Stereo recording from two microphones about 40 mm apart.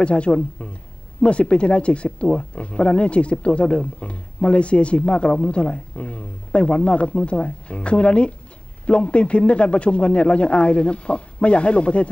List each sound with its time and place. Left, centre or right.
0.0 s speech: left